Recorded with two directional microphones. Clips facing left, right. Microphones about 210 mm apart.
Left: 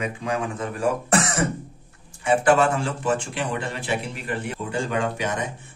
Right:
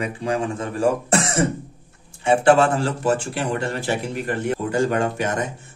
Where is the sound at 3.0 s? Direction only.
40° right (ahead or behind).